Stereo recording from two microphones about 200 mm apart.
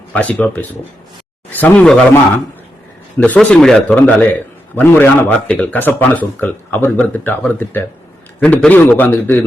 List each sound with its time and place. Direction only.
0.1 s a man's voice: 5° left (ahead or behind)
3.2 s a man's voice: 5° left (ahead or behind)